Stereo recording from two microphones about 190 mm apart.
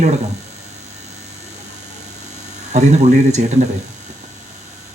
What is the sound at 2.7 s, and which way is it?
Speech, 40° right (ahead or behind).